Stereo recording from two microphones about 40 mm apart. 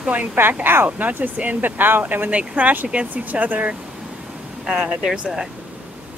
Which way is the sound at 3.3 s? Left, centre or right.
Right.